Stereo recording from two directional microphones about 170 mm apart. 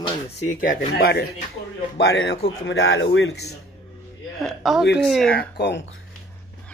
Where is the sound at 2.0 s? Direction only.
80° left.